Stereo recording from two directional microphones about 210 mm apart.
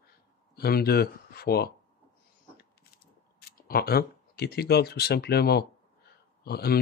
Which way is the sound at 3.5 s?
45° left (ahead or behind).